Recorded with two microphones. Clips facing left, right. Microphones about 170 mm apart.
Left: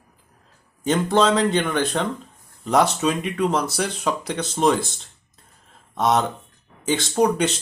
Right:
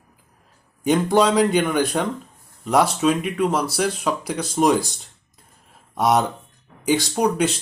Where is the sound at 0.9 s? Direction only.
15° right (ahead or behind).